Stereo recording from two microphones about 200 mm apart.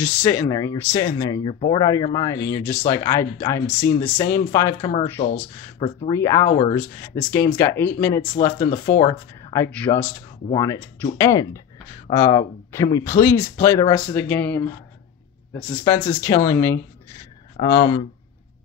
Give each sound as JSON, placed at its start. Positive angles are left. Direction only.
{"t": 0.0, "sound": "speech", "side_deg": 10}
{"t": 1.4, "sound": "speech", "side_deg": 30}
{"t": 6.1, "sound": "speech", "side_deg": 15}
{"t": 15.8, "sound": "speech", "side_deg": 10}